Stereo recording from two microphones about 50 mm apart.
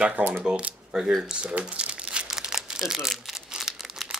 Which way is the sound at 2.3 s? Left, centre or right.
Centre.